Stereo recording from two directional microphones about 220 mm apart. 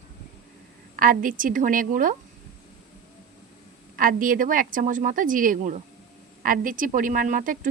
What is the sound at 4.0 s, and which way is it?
Speech, 40° right (ahead or behind).